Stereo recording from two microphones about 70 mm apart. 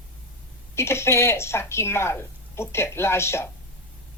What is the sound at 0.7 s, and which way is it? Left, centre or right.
Speech, left.